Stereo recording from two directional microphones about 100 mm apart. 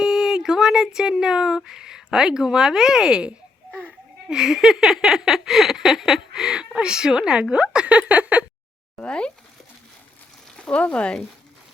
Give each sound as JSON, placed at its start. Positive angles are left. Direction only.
{"t": 0.0, "sound": "speech", "side_deg": -5}
{"t": 9.0, "sound": "speech", "side_deg": 10}
{"t": 10.6, "sound": "speech", "side_deg": 10}